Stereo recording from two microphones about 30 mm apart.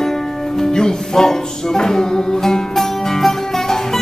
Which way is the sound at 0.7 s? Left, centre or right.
Left.